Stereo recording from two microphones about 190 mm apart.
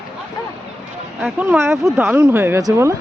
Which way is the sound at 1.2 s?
10° right (ahead or behind).